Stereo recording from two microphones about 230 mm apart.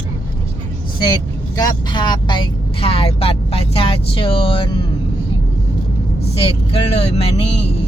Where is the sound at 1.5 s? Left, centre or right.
Centre.